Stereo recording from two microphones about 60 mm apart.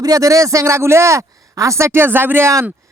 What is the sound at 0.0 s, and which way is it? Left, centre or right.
A man's voice, right.